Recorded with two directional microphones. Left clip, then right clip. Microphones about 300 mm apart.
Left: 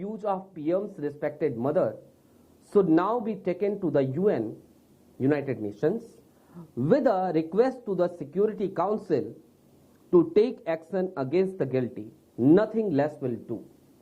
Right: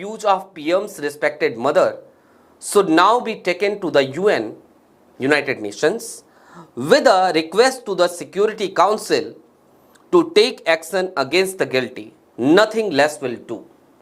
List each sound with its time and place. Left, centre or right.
0.0 s speech: centre
10.3 s speech: centre